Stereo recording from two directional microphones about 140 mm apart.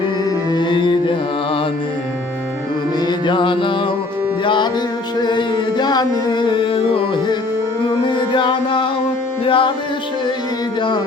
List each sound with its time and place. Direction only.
0.3 s music: 30° left (ahead or behind)
3.1 s music: 35° left (ahead or behind)